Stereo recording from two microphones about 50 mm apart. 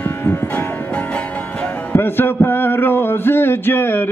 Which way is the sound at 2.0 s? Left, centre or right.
Left.